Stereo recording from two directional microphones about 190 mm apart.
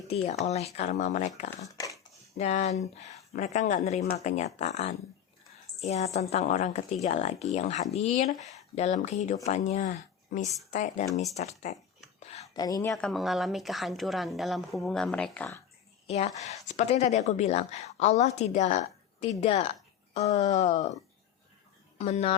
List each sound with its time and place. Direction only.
0.4 s a woman's voice: 35° left (ahead or behind)
1.5 s speech: 15° left (ahead or behind)
2.4 s a woman's voice: 35° left (ahead or behind)
12.2 s a sound: 35° left (ahead or behind)
12.5 s speech: 20° left (ahead or behind)
13.0 s a woman's voice: centre (ahead or behind)
16.0 s a woman's voice: 35° left (ahead or behind)
21.9 s speech: 35° left (ahead or behind)